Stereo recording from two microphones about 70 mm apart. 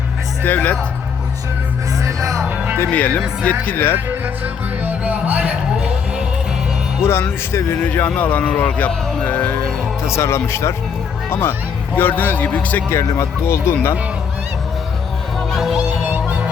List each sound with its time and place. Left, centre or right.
0.4 s speech: left
2.9 s speech: left
4.8 s music: right
7.1 s speech: left
7.9 s speech: left
10.2 s speech: left
12.9 s speech: left
15.5 s speech: centre